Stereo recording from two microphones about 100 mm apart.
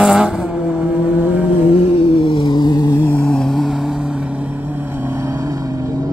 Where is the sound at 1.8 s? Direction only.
60° left (ahead or behind); by 3.0 s 45° left (ahead or behind).